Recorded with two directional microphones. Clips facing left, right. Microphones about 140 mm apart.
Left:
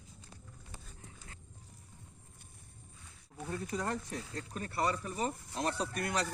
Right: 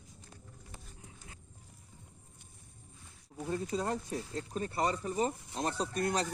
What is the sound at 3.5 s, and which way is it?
Speech, 25° right (ahead or behind).